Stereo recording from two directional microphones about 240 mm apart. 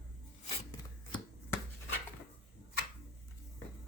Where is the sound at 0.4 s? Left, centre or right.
Left.